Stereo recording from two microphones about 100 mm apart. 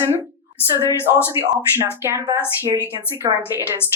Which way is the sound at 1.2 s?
25° right (ahead or behind).